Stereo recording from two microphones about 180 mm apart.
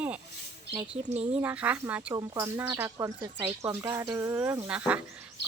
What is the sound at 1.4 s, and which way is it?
Speech, 10° right (ahead or behind).